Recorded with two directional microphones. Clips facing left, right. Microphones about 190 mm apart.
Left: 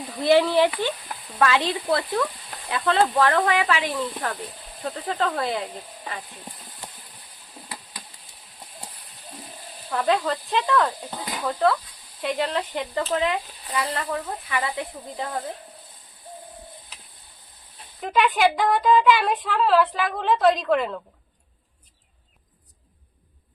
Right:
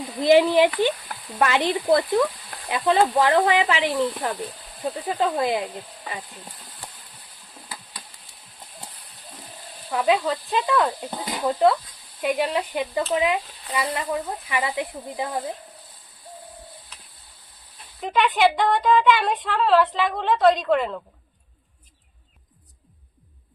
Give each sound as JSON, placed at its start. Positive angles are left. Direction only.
{"t": 0.2, "sound": "speech", "side_deg": -15}
{"t": 9.9, "sound": "speech", "side_deg": -5}
{"t": 10.8, "sound": "speech", "side_deg": -15}
{"t": 18.0, "sound": "speech", "side_deg": 0}